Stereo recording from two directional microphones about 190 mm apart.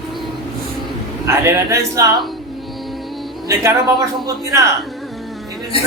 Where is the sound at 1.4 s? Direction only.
15° right (ahead or behind).